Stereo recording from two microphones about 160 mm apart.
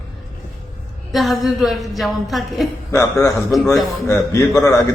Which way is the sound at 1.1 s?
Centre (ahead or behind).